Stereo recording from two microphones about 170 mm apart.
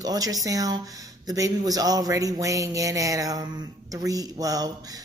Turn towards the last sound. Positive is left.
turn(degrees=-20)  # may be behind; listen again after turning